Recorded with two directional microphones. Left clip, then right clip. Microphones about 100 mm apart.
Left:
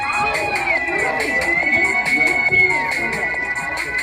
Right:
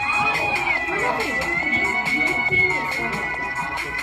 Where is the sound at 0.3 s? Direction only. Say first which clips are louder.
Left 2 dB; 40° right (ahead or behind).